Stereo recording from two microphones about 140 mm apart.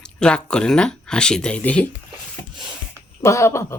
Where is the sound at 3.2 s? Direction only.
20° left (ahead or behind).